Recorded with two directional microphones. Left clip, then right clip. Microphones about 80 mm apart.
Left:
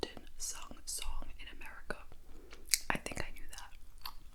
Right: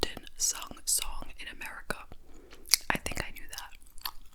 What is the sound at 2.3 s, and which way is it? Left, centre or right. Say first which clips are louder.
Whispering: right 7 dB; right.